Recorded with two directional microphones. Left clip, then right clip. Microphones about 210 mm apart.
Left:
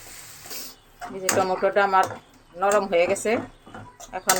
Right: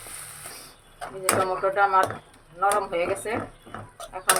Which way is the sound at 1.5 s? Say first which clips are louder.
Left 2 dB; 35° left (ahead or behind).